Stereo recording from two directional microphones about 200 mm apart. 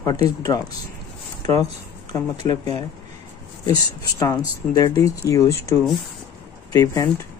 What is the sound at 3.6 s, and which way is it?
Speech, 15° left (ahead or behind).